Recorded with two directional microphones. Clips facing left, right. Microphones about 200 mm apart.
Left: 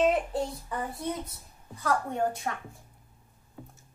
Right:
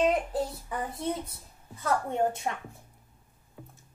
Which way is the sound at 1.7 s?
25° right (ahead or behind).